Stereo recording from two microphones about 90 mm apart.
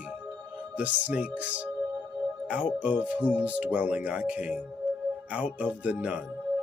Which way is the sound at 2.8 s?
15° right (ahead or behind).